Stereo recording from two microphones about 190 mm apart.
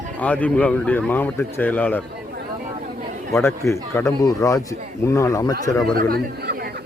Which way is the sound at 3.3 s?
15° left (ahead or behind).